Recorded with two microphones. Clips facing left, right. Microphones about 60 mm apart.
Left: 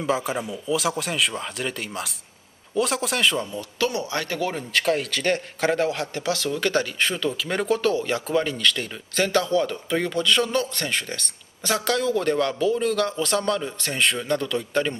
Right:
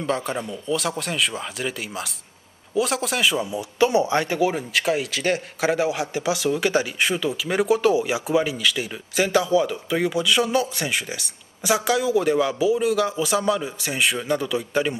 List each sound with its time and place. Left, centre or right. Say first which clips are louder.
0.0 s a man's voice: left 1 dB; centre